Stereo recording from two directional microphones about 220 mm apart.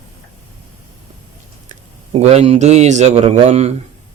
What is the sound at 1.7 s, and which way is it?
A man's voice, 30° right (ahead or behind).